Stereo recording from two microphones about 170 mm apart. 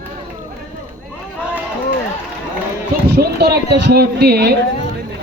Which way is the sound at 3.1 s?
70° right (ahead or behind).